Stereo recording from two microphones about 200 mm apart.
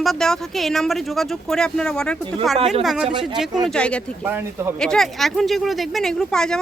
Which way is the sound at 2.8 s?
Centre (ahead or behind).